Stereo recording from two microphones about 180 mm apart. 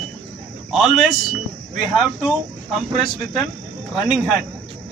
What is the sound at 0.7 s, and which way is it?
Speech, centre (ahead or behind).